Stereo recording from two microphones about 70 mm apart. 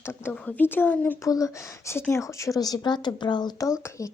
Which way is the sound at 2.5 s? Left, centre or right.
Left.